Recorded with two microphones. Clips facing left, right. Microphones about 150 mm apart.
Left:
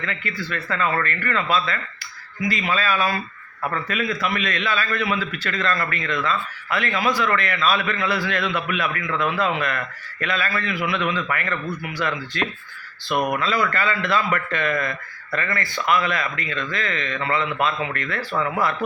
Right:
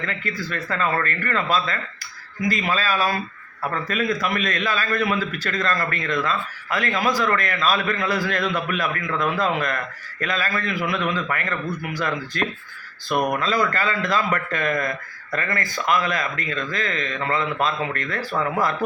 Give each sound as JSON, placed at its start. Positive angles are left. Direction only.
{"t": 0.0, "sound": "a man's voice", "side_deg": -40}
{"t": 13.1, "sound": "speech", "side_deg": 5}
{"t": 13.4, "sound": "speech", "side_deg": -40}